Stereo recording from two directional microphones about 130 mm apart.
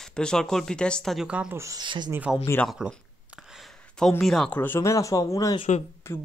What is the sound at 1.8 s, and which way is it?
Speech, 35° right (ahead or behind).